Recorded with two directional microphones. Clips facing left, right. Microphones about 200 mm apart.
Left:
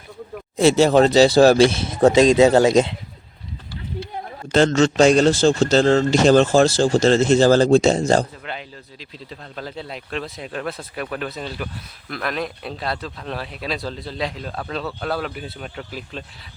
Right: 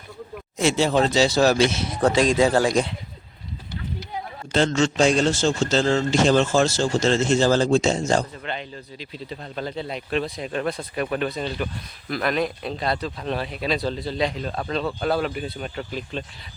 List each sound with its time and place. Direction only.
0.6 s speech: 40° left (ahead or behind); by 2.9 s 20° left (ahead or behind)
4.5 s speech: 40° left (ahead or behind)
5.8 s speech: 50° left (ahead or behind); by 8.3 s 35° left (ahead or behind)
8.4 s speech: 5° left (ahead or behind)